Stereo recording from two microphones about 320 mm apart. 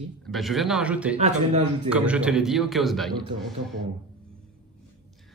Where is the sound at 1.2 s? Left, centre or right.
Right.